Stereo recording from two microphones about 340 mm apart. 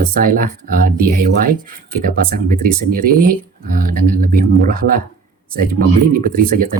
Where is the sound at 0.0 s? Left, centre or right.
Right.